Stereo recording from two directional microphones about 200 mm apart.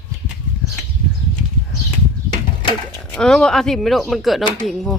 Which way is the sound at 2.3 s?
20° left (ahead or behind).